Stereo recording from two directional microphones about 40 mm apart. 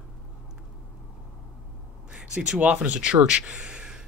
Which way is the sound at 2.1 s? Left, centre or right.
Right.